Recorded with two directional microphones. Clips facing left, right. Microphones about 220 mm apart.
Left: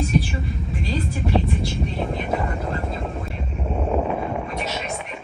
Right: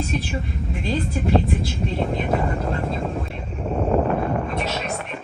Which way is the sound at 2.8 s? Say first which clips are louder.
Right 3 dB; centre (ahead or behind).